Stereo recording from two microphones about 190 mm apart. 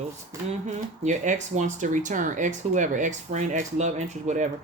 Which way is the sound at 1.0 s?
40° right (ahead or behind).